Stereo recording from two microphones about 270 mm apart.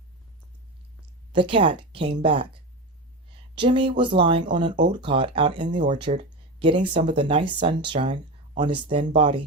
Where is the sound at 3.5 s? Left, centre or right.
Centre.